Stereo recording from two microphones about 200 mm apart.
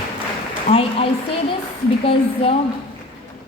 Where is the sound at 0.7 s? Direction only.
30° left (ahead or behind).